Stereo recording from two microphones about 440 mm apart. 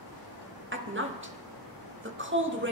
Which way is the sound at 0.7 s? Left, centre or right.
Right.